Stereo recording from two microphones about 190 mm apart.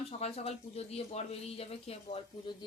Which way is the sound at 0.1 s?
35° left (ahead or behind).